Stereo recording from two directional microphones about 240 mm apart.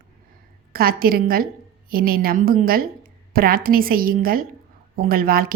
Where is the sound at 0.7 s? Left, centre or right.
Right.